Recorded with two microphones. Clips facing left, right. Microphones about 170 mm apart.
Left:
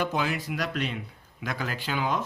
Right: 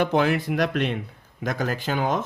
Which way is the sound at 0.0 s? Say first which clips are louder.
Right 7 dB; 55° right (ahead or behind).